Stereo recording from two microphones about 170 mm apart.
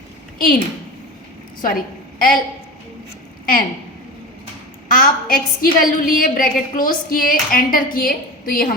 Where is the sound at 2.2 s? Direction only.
55° left (ahead or behind).